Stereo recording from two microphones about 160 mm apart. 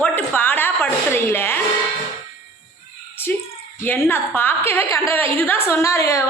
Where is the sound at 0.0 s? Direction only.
10° left (ahead or behind).